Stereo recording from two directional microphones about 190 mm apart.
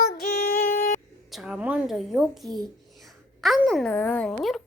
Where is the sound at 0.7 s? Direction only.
40° left (ahead or behind).